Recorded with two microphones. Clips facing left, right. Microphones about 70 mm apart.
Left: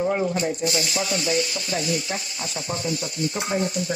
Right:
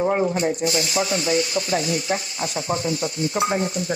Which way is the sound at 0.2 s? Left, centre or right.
Right.